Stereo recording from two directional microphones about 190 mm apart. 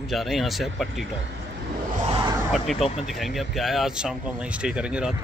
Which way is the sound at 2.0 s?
30° right (ahead or behind).